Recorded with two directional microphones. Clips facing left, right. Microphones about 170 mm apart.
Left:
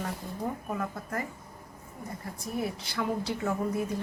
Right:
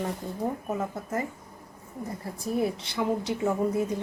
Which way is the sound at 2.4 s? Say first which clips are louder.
Right 6 dB; 25° right (ahead or behind).